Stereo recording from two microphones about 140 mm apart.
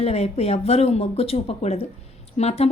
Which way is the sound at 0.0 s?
45° left (ahead or behind).